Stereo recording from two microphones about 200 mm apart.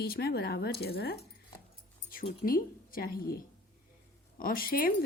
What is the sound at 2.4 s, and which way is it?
Speech, 45° left (ahead or behind).